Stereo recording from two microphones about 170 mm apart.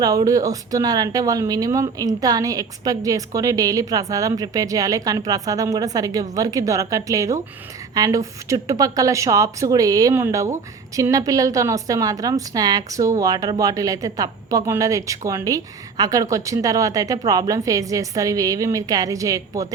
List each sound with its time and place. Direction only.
0.0 s a woman's voice: 20° right (ahead or behind)